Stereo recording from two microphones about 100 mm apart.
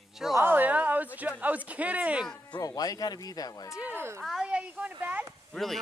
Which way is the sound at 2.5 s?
40° left (ahead or behind).